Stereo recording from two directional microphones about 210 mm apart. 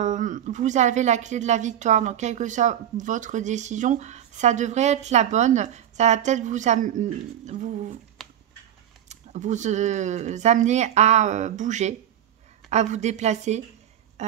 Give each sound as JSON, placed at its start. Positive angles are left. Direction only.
{"t": 0.0, "sound": "a woman's voice", "side_deg": -35}
{"t": 8.2, "sound": "a sound", "side_deg": 0}
{"t": 9.1, "sound": "a woman's voice", "side_deg": -35}